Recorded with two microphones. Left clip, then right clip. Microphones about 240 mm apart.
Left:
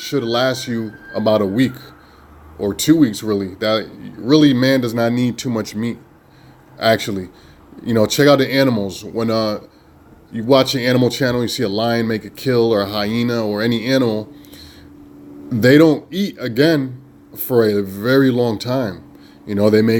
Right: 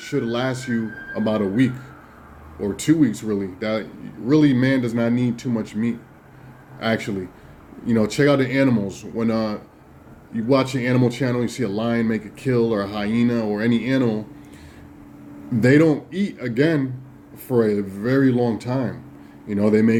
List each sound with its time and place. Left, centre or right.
0.0 s speech: left
15.6 s speech: left